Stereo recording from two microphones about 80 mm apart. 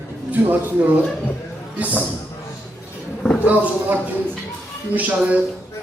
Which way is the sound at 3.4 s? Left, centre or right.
Centre.